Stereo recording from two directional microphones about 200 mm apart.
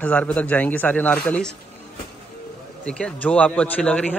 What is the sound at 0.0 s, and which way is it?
Speech, 5° left (ahead or behind).